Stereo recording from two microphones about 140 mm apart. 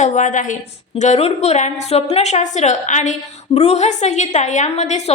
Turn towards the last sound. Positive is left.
turn(degrees=55)  # may be behind; listen again after turning